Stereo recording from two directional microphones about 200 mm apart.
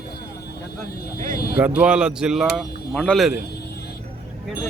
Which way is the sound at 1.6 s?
5° right (ahead or behind).